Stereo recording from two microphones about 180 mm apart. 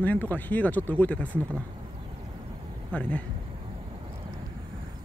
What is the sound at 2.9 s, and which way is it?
Speech, 5° left (ahead or behind).